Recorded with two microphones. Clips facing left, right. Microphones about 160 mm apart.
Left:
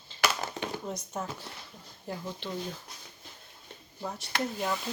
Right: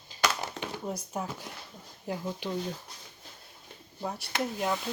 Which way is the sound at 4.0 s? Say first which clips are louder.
Right 2 dB; 10° right (ahead or behind).